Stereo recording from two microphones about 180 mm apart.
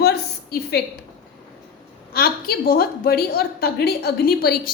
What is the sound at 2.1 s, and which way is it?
A woman's voice, 60° left (ahead or behind).